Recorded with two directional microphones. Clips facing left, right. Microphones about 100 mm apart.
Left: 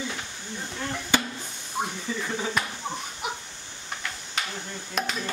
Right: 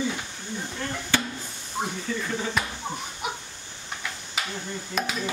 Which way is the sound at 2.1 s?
10° left (ahead or behind).